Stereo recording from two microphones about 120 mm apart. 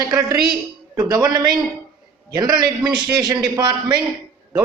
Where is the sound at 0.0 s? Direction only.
30° right (ahead or behind).